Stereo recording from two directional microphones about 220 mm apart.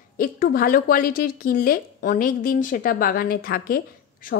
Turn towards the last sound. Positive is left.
turn(degrees=40)  # may be behind; listen again after turning